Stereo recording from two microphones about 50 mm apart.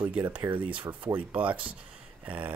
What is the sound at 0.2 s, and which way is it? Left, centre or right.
Speech, right.